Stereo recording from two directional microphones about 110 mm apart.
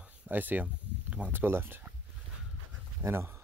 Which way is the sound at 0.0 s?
15° right (ahead or behind).